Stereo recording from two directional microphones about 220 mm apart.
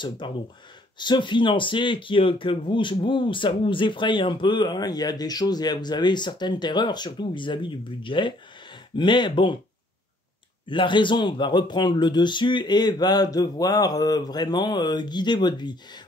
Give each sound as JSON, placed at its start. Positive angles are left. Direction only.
{"t": 0.2, "sound": "speech", "side_deg": 20}
{"t": 10.7, "sound": "speech", "side_deg": 20}